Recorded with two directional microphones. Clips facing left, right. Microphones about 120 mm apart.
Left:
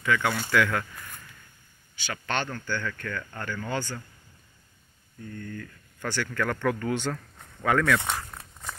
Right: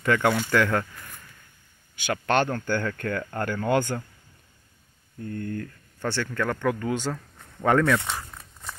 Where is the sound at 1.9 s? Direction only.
50° right (ahead or behind).